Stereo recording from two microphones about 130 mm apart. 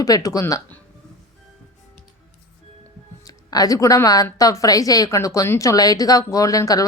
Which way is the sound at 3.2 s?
30° left (ahead or behind).